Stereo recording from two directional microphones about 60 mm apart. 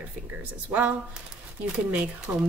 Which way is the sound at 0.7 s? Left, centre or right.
Right.